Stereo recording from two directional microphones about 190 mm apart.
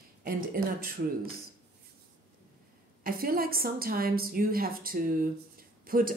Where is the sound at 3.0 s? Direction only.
50° right (ahead or behind).